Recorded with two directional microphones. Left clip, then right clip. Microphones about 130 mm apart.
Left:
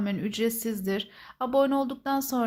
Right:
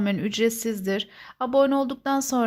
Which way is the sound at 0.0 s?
30° right (ahead or behind).